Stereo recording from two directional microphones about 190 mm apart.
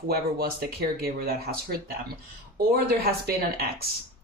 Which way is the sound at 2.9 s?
55° right (ahead or behind).